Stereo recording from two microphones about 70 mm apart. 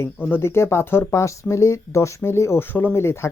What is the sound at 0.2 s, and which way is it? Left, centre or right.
Speech, left.